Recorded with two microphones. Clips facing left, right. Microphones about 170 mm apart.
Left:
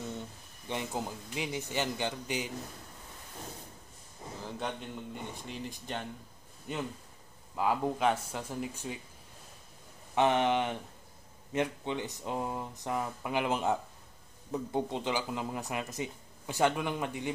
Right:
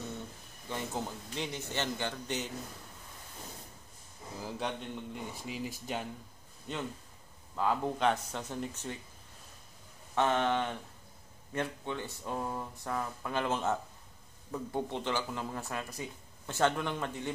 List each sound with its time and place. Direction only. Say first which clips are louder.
0.7 s speech: left 1 dB; 15° left (ahead or behind)
4.4 s speech: right 1 dB; 5° right (ahead or behind)
6.7 s speech: left 1 dB; 10° left (ahead or behind)
10.1 s speech: left 2 dB; 15° left (ahead or behind)